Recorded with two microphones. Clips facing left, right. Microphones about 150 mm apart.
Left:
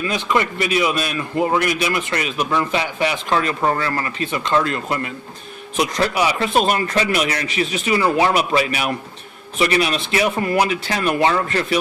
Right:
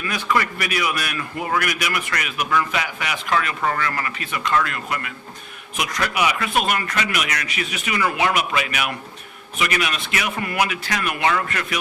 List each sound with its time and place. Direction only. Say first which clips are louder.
0.0 s a man's voice: left 3 dB; 20° left (ahead or behind)